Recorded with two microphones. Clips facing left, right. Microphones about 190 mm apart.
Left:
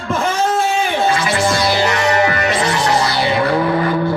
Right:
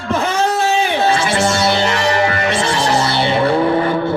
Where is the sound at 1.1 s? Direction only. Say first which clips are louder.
Right 1 dB; 30° right (ahead or behind).